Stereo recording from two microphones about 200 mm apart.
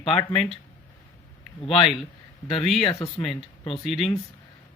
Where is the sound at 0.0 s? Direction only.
30° left (ahead or behind).